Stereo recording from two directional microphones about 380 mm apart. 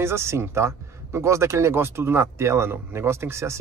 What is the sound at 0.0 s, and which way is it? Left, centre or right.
Speech, centre.